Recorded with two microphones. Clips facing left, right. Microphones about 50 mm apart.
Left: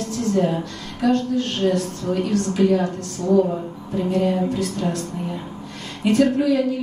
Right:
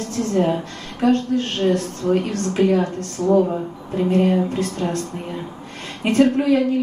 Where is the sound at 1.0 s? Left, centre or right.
Right.